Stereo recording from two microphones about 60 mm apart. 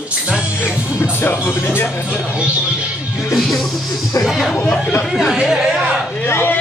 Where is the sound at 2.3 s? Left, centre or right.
Right.